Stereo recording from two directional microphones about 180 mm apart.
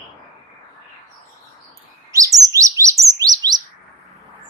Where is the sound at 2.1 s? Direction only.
20° right (ahead or behind).